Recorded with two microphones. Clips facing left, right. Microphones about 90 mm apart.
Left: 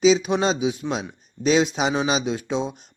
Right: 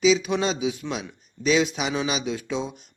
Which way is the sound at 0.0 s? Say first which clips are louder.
Left 3 dB; 30° left (ahead or behind).